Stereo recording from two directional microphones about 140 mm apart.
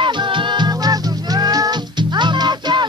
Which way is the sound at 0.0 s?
35° right (ahead or behind).